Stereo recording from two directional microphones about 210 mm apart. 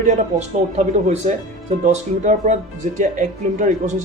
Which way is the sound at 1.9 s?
35° right (ahead or behind).